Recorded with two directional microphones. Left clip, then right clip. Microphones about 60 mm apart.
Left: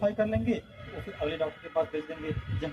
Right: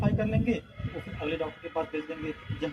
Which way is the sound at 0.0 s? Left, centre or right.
Left.